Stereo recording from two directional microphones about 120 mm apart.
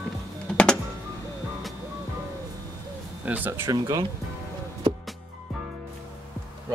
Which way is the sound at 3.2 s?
15° right (ahead or behind).